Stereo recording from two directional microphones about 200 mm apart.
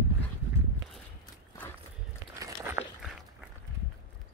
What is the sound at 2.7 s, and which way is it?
Walk, 10° right (ahead or behind).